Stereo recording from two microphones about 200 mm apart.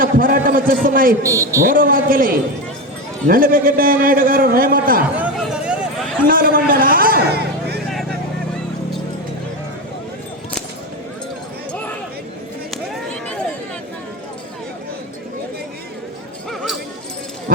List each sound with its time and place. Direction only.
0.0 s a man's voice: 45° right (ahead or behind)
1.2 s a man's voice: 15° right (ahead or behind)
1.6 s a man's voice: 45° right (ahead or behind)
5.1 s a sound: 5° right (ahead or behind)
6.2 s a man's voice: 45° right (ahead or behind)
12.7 s a sound: 5° left (ahead or behind)